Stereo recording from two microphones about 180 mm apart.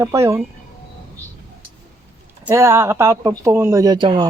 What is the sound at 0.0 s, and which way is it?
Speech, 15° right (ahead or behind).